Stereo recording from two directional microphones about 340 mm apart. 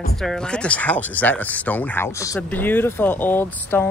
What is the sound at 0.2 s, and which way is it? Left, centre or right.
Speech, centre.